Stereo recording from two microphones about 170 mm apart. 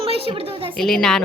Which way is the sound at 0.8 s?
5° left (ahead or behind).